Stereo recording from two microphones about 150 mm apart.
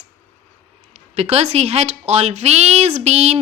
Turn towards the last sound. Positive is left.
turn(degrees=-45)  # may be behind; listen again after turning